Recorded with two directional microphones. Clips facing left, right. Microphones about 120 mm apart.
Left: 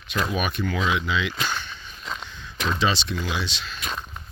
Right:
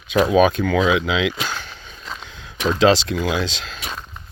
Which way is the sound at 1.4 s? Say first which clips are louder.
Right 1 dB; 90° right.